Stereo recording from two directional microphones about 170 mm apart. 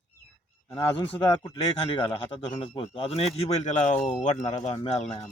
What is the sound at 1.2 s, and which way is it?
Speech, 30° left (ahead or behind).